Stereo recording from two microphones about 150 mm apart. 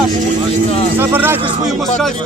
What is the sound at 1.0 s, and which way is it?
Speech, 15° right (ahead or behind).